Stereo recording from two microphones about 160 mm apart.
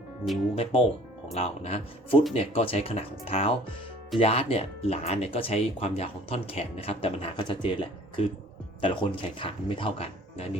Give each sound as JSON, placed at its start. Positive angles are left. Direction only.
{"t": 0.5, "sound": "speech", "side_deg": 40}